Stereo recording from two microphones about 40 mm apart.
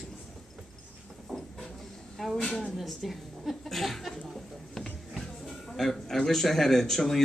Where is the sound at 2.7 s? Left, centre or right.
Centre.